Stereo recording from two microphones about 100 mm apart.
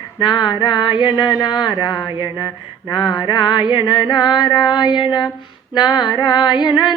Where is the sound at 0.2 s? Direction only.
50° left (ahead or behind).